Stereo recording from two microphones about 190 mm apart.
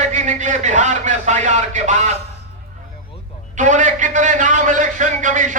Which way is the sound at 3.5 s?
40° right (ahead or behind).